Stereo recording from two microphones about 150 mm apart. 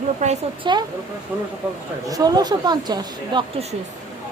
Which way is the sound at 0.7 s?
30° right (ahead or behind).